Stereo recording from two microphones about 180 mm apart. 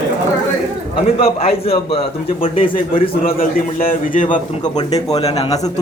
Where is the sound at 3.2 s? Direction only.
50° left (ahead or behind); by 5.5 s 35° left (ahead or behind).